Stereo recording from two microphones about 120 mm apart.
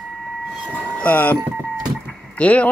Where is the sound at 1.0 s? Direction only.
15° left (ahead or behind).